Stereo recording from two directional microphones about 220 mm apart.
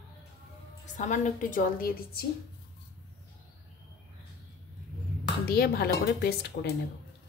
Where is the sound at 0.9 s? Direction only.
35° left (ahead or behind).